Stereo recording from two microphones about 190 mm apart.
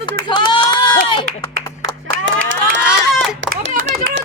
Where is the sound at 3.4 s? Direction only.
75° right (ahead or behind).